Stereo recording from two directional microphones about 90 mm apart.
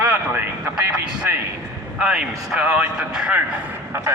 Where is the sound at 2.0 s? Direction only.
10° right (ahead or behind).